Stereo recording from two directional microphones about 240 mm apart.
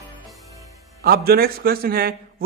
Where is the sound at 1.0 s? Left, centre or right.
Right.